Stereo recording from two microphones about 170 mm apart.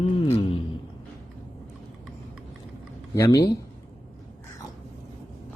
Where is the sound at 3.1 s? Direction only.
15° left (ahead or behind).